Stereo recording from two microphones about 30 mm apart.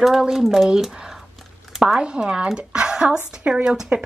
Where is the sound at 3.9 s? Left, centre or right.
Right.